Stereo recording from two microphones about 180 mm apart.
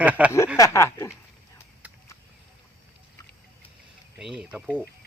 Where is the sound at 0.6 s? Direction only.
15° left (ahead or behind).